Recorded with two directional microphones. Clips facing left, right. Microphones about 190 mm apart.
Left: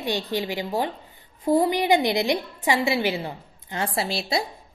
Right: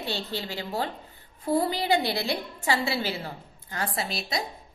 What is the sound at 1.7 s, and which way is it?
A woman's voice, 20° left (ahead or behind).